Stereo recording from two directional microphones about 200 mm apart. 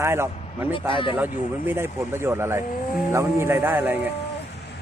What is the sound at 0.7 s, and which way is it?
Speech, 25° left (ahead or behind).